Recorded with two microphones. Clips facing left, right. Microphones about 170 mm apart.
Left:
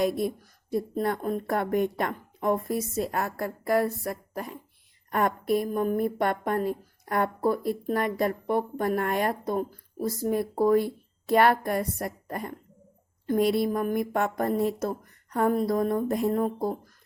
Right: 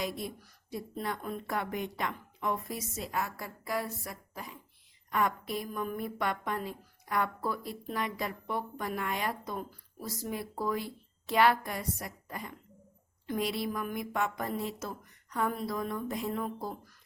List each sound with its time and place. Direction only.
0.0 s speech: 50° left (ahead or behind)